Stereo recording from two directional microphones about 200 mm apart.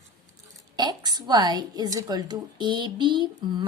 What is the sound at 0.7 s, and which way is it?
A woman's voice, 20° right (ahead or behind).